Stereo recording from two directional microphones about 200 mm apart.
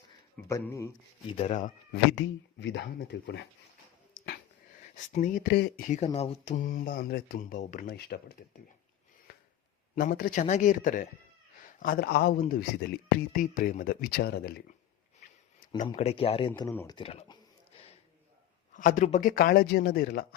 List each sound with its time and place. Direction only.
0.4 s speech: 15° left (ahead or behind)
1.3 s speech: 30° left (ahead or behind)
1.9 s speech: 65° left (ahead or behind)
4.1 s a sound: 40° left (ahead or behind)
4.9 s a man's voice: 40° left (ahead or behind)
5.9 s a man's voice: 35° left (ahead or behind)
9.3 s a sound: 50° left (ahead or behind)
9.9 s a man's voice: 45° left (ahead or behind)
16.0 s speech: 30° left (ahead or behind)
16.6 s speech: 20° left (ahead or behind)
17.7 s a sound: 30° left (ahead or behind)
18.7 s a man's voice: 40° left (ahead or behind)